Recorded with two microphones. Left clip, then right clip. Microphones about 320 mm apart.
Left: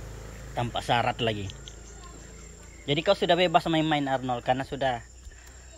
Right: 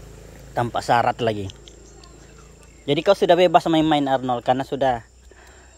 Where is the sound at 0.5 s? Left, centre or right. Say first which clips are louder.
Right 7 dB; centre.